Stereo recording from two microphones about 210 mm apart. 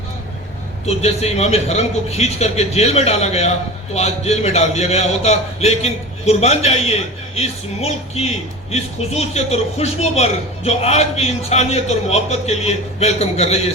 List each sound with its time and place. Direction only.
0.9 s a man's voice: 30° left (ahead or behind)